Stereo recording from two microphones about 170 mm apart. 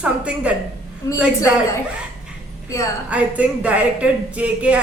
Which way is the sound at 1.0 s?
20° left (ahead or behind).